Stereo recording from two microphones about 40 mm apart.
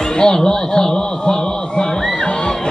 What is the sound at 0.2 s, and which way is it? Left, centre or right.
A man's voice, centre.